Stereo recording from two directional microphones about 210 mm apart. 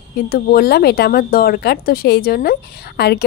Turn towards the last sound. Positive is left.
turn(degrees=50)  # may be behind; listen again after turning